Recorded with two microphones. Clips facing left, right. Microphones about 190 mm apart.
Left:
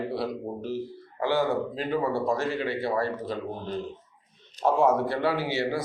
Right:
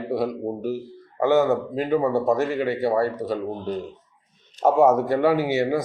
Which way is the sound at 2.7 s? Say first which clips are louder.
Right 6 dB; 40° right (ahead or behind).